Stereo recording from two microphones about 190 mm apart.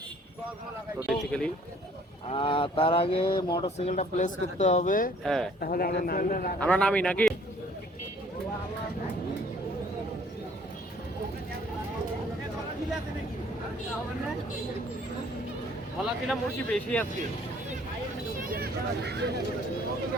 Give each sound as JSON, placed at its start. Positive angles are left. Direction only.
{"t": 1.0, "sound": "speech", "side_deg": 5}
{"t": 2.2, "sound": "speech", "side_deg": 30}
{"t": 5.2, "sound": "speech", "side_deg": 0}
{"t": 5.5, "sound": "speech", "side_deg": 50}
{"t": 6.6, "sound": "a man's voice", "side_deg": 5}
{"t": 16.3, "sound": "speech", "side_deg": 5}
{"t": 18.4, "sound": "vehicle", "side_deg": -50}